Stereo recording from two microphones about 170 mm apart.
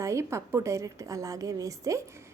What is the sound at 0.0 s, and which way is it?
A woman's voice, 15° right (ahead or behind).